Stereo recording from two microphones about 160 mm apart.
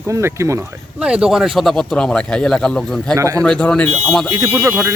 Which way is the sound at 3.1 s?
20° right (ahead or behind).